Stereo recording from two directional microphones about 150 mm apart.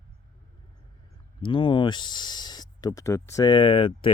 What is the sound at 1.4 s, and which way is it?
Speech, 35° left (ahead or behind).